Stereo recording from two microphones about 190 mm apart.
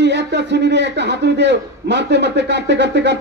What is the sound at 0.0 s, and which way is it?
A man's voice, 65° right (ahead or behind).